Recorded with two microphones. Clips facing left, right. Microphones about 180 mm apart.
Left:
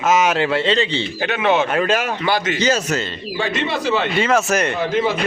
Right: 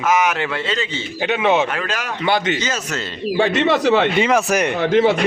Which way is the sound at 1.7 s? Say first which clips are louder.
Left 7 dB; 20° left (ahead or behind).